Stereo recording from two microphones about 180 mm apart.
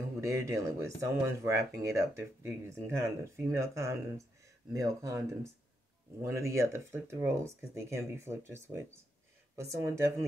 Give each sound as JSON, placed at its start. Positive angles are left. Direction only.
{"t": 0.2, "sound": "speech", "side_deg": -15}